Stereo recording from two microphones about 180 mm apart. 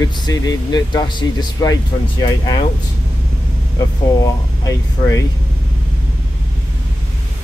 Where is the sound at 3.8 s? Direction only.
20° left (ahead or behind).